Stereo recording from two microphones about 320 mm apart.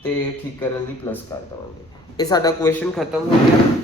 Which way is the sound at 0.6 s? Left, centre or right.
Centre.